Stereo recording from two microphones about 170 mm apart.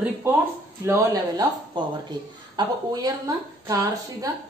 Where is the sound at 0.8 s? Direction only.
15° right (ahead or behind).